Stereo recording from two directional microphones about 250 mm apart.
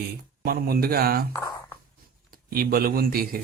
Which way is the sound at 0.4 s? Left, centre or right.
Right.